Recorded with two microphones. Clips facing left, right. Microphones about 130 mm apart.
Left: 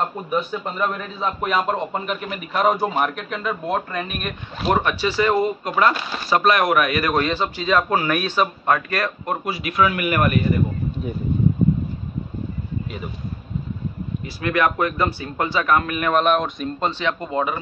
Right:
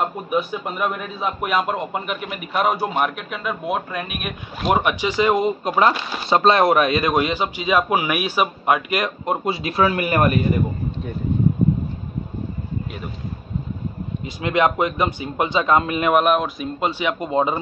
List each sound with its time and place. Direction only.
0.3 s a man's voice: 10° right (ahead or behind)
4.6 s a man's voice: 15° right (ahead or behind); by 10.4 s 30° right (ahead or behind)
14.4 s a man's voice: 20° right (ahead or behind)
16.1 s speech: 5° right (ahead or behind)